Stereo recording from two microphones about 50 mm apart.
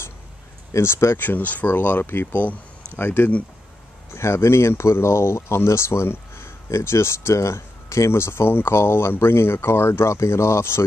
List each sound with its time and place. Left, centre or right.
0.7 s speech: left
1.1 s speech: left
3.0 s speech: left
4.1 s speech: left